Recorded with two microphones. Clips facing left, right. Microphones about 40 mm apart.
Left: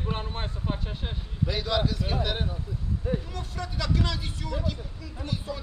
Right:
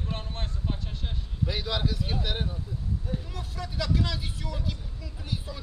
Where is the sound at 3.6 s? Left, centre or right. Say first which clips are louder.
Even; centre.